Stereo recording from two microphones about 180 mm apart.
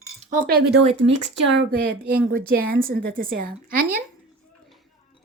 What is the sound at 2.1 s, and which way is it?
A woman's voice, 55° right (ahead or behind).